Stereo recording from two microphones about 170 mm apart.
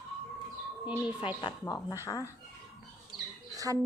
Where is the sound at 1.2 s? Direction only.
30° left (ahead or behind).